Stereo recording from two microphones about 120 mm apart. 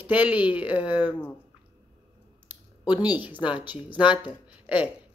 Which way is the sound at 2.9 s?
15° right (ahead or behind).